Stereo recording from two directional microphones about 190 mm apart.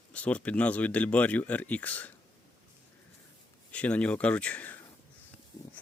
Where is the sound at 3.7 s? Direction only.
5° left (ahead or behind).